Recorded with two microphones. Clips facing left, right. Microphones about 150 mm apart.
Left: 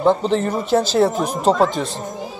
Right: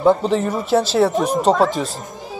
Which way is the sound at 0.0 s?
5° right (ahead or behind).